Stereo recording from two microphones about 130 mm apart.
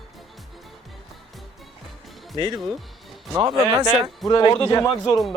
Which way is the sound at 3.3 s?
30° right (ahead or behind).